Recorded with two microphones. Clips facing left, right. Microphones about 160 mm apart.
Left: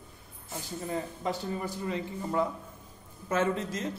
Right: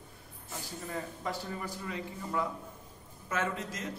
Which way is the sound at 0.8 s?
25° left (ahead or behind).